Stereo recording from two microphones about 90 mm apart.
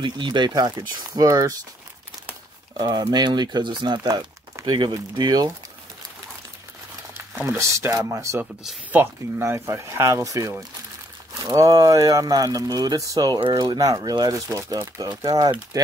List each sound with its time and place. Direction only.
0.0 s speech: 60° right (ahead or behind); by 1.5 s 35° right (ahead or behind)
2.8 s speech: 50° right (ahead or behind)
5.1 s speech: 50° right (ahead or behind)
7.4 s speech: 30° right (ahead or behind)